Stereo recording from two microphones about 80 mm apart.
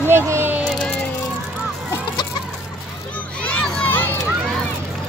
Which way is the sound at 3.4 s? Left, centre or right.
Centre.